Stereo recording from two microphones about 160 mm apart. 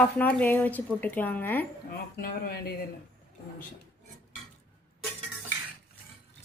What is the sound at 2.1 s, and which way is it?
Speech, 70° left (ahead or behind).